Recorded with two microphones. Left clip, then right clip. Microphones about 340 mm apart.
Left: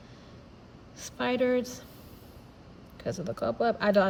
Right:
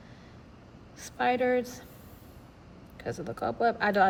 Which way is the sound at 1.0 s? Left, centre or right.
Centre.